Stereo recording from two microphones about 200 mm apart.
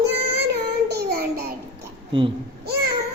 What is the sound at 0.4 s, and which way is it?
Child singing, 55° right (ahead or behind).